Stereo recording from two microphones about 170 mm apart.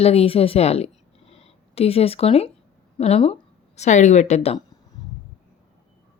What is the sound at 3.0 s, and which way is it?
A woman's voice, 35° left (ahead or behind).